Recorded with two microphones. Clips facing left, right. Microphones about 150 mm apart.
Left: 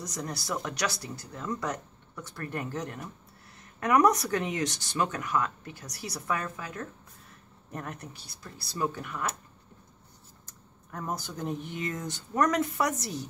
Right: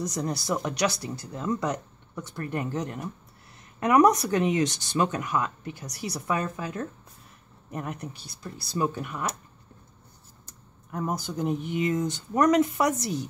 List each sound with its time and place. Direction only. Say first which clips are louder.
0.1 s speech: right 6 dB; 25° right (ahead or behind)
7.7 s speech: right 5 dB; 15° right (ahead or behind)
10.9 s speech: right 5 dB; 15° right (ahead or behind)